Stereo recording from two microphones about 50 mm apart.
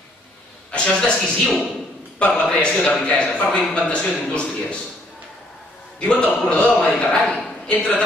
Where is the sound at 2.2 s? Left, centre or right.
Left.